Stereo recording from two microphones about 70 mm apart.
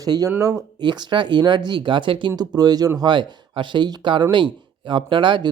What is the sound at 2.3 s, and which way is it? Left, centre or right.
Speech, right.